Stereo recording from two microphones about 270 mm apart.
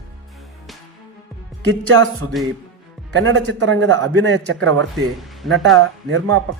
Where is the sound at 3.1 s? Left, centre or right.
Right.